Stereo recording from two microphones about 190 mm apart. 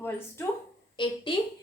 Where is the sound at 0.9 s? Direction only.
25° left (ahead or behind).